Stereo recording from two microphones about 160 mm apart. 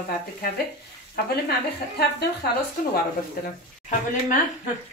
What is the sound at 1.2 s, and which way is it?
Speech, 75° left (ahead or behind).